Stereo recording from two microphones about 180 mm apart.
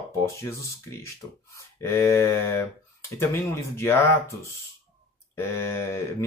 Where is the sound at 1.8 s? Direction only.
15° left (ahead or behind).